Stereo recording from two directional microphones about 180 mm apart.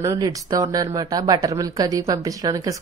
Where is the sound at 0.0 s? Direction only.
20° right (ahead or behind).